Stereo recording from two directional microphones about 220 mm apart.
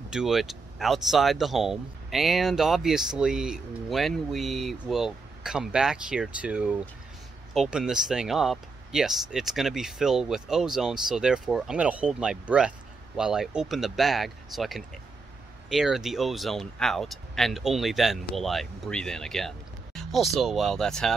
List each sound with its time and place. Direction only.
0.1 s speech: centre (ahead or behind)